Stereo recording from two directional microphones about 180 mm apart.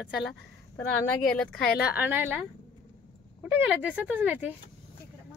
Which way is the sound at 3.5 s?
10° right (ahead or behind).